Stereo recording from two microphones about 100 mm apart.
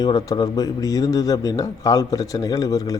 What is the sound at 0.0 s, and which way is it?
Speech, 40° left (ahead or behind).